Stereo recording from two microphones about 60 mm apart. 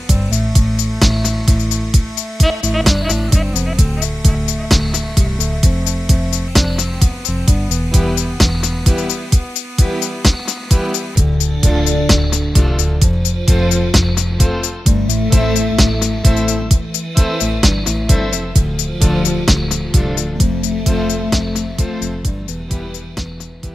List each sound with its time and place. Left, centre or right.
0.1 s music: centre